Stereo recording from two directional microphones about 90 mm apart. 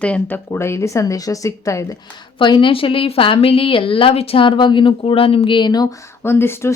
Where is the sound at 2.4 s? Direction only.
65° left (ahead or behind).